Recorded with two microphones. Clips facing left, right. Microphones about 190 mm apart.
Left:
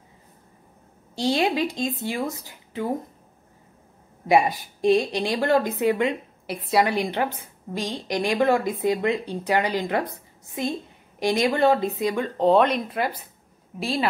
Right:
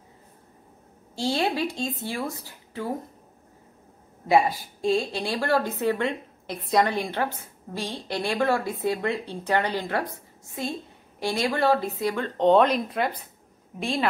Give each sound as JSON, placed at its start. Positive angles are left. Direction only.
{"t": 1.1, "sound": "speech", "side_deg": 20}
{"t": 4.3, "sound": "a woman's voice", "side_deg": 15}
{"t": 11.1, "sound": "a woman's voice", "side_deg": 15}
{"t": 12.4, "sound": "speech", "side_deg": 0}